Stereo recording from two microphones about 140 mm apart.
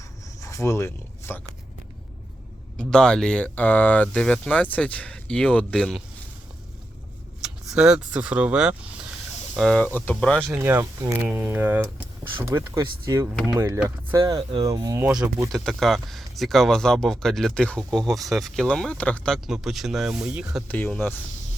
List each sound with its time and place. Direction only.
0.4 s speech: 20° left (ahead or behind)
2.7 s speech: 5° left (ahead or behind)
7.4 s speech: 5° right (ahead or behind)
9.6 s speech: 5° left (ahead or behind)
10.5 s speech: 15° right (ahead or behind)
15.5 s speech: centre (ahead or behind)
19.5 s speech: 5° right (ahead or behind)
20.7 s speech: 10° left (ahead or behind)